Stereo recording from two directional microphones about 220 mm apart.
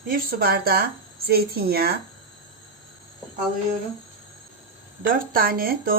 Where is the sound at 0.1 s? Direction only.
40° right (ahead or behind).